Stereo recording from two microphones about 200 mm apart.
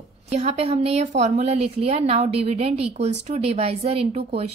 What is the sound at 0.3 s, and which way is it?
A woman's voice, 35° right (ahead or behind).